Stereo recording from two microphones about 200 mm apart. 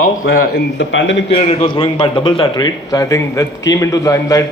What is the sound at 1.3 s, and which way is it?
A man's voice, 25° left (ahead or behind).